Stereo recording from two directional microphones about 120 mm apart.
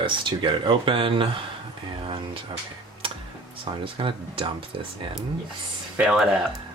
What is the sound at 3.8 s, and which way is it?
Speech, 50° right (ahead or behind).